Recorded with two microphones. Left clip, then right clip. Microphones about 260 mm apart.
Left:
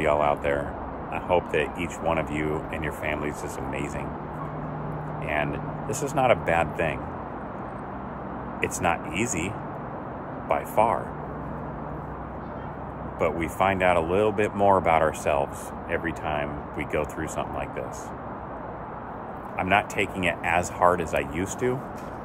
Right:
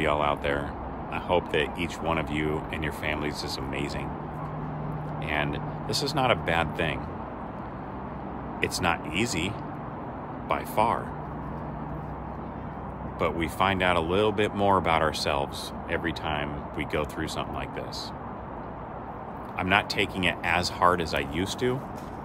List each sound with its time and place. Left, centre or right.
0.0 s speech: centre
5.3 s speech: centre
8.5 s speech: centre
10.5 s speech: centre
13.2 s speech: centre
19.5 s speech: centre